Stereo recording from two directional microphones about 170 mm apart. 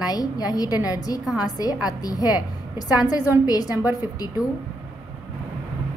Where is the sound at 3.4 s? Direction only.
20° left (ahead or behind).